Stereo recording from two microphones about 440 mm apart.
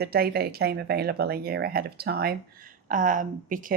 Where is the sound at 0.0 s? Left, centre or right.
Right.